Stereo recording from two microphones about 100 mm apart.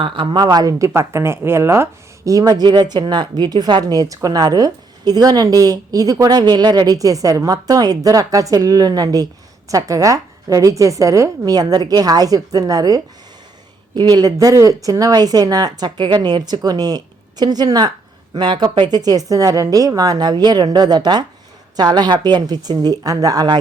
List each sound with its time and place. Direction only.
0.0 s a woman's voice: 60° right (ahead or behind); by 0.9 s 40° right (ahead or behind)
0.9 s a woman's voice: 25° right (ahead or behind)